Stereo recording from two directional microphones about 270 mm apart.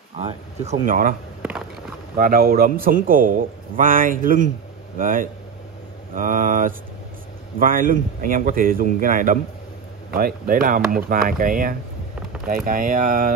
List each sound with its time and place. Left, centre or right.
0.2 s speech: right
2.1 s a man's voice: right